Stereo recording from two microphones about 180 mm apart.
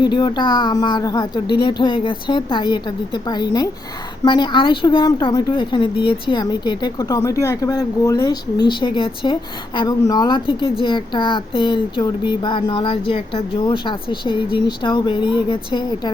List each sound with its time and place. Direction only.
0.0 s a woman's voice: 25° left (ahead or behind)